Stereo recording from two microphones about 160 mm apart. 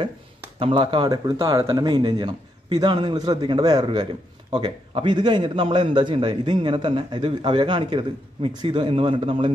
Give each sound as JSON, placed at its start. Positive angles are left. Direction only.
{"t": 0.6, "sound": "speech", "side_deg": -35}